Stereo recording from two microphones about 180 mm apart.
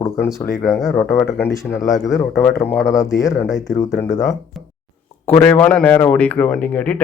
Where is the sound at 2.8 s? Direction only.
5° right (ahead or behind).